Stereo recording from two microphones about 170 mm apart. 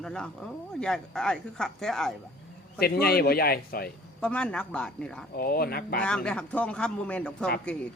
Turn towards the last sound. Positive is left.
turn(degrees=5)  # may be behind; listen again after turning